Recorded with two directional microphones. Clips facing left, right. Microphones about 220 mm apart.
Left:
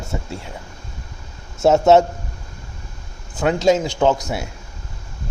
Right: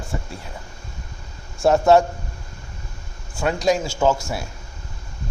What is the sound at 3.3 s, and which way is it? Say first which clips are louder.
Speech: left 4 dB; 20° left (ahead or behind).